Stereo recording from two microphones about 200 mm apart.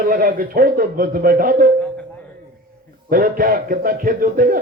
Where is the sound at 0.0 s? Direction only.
45° right (ahead or behind).